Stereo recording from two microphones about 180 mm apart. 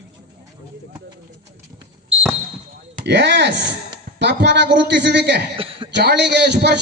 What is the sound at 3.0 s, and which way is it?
A man's voice, 70° right (ahead or behind).